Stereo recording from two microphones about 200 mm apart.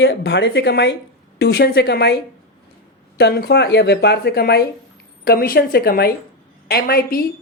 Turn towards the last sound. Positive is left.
turn(degrees=50)  # may be behind; listen again after turning